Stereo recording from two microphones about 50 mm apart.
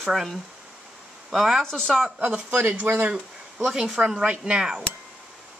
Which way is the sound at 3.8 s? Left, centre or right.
Centre.